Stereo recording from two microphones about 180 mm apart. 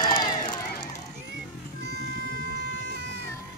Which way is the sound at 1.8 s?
70° right (ahead or behind).